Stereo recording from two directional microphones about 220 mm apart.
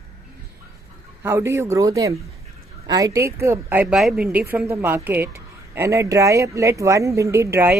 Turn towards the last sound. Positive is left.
turn(degrees=-10)  # may be behind; listen again after turning